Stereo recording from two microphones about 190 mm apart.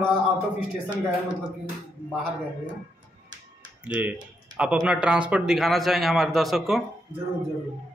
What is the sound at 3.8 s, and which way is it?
A man's voice, 10° right (ahead or behind).